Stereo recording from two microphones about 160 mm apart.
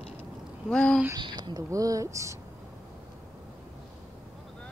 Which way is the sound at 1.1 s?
25° right (ahead or behind).